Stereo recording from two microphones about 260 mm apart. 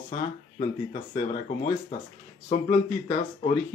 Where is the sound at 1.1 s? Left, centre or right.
Left.